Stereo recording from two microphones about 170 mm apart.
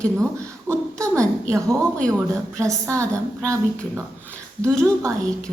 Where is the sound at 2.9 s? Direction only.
20° right (ahead or behind).